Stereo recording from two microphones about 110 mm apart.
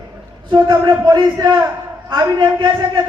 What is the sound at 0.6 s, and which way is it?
Speech, 40° right (ahead or behind).